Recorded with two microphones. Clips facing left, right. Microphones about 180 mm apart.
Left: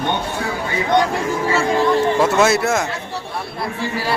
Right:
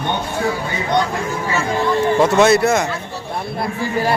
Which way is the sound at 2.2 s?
Centre (ahead or behind).